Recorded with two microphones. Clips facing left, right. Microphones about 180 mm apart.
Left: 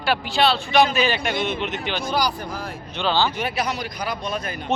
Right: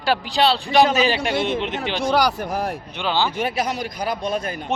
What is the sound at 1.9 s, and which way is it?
Speech, 75° right (ahead or behind).